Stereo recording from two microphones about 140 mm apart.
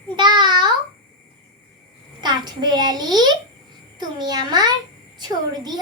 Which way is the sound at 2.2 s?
30° right (ahead or behind).